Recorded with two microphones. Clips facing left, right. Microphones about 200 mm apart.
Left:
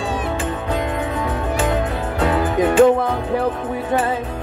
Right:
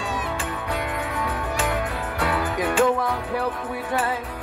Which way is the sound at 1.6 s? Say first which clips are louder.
Left 6 dB; 25° left (ahead or behind).